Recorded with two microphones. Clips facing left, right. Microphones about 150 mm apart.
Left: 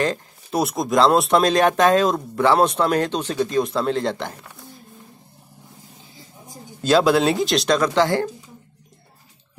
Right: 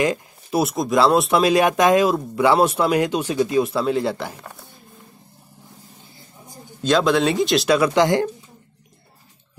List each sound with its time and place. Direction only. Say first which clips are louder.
0.0 s speech: right 2 dB; 10° right (ahead or behind)
6.8 s speech: left 1 dB; 5° left (ahead or behind); by 8.3 s 15° right (ahead or behind)